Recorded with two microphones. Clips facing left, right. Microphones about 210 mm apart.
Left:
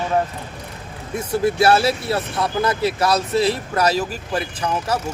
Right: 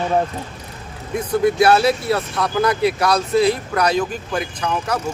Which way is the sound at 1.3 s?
30° left (ahead or behind).